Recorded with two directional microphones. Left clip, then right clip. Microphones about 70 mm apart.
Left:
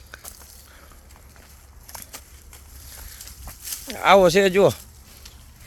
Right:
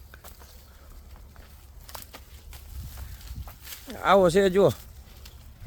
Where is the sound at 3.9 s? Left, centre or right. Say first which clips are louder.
Left 6 dB; left.